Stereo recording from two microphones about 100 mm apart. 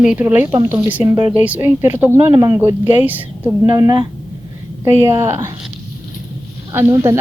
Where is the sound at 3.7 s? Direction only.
30° right (ahead or behind).